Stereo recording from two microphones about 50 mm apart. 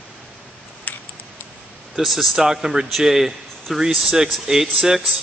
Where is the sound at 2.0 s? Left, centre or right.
Centre.